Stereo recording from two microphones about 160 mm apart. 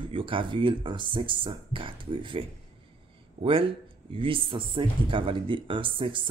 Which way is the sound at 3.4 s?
35° right (ahead or behind).